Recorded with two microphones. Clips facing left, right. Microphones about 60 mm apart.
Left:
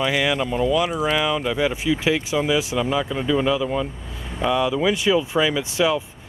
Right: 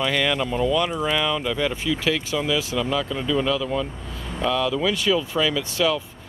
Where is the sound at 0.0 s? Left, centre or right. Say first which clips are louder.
Left 1 dB; centre.